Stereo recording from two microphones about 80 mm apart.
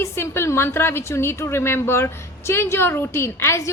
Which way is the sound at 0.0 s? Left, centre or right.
Left.